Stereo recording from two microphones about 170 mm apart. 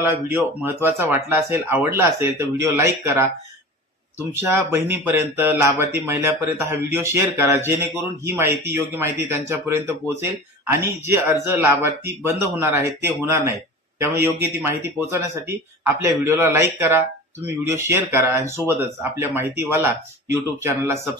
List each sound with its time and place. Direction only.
0.3 s speech: 10° right (ahead or behind)
4.4 s speech: 15° right (ahead or behind)